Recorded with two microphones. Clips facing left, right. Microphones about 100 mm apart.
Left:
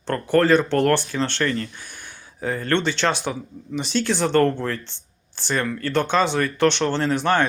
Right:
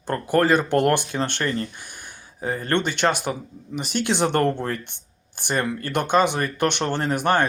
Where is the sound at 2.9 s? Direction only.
15° right (ahead or behind).